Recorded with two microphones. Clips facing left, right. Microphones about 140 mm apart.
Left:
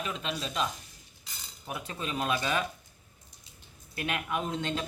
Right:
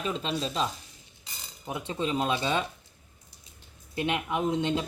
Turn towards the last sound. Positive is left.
turn(degrees=-20)  # may be behind; listen again after turning